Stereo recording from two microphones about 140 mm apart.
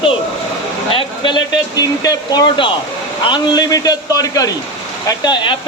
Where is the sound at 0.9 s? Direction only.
35° left (ahead or behind).